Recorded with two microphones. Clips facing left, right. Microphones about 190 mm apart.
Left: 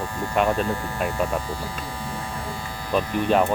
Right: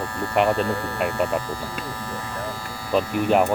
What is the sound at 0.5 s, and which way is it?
Speech, 15° left (ahead or behind).